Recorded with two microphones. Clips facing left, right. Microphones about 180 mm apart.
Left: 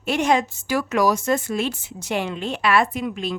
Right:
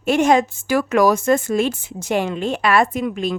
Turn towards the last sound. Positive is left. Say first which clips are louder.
# right 4 dB
turn(degrees=-45)  # may be behind; listen again after turning